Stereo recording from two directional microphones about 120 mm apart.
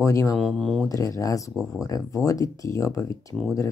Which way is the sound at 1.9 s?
30° left (ahead or behind).